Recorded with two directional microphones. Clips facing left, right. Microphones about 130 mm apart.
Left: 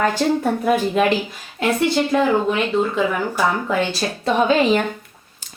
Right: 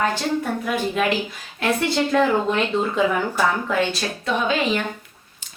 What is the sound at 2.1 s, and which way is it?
Speech, 15° left (ahead or behind).